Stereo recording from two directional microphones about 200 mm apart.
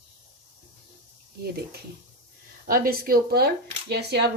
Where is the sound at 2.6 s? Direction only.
45° right (ahead or behind).